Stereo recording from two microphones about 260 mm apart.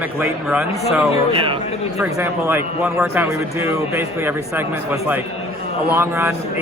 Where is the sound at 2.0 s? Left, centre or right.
Centre.